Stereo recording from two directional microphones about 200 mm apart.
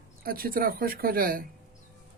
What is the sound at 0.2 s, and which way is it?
Speech, 45° right (ahead or behind).